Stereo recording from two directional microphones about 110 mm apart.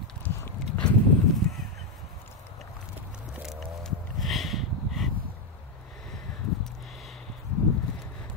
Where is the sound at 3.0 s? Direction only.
15° right (ahead or behind).